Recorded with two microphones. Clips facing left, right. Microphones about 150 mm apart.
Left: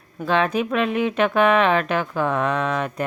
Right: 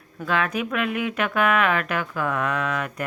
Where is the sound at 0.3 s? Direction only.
30° left (ahead or behind).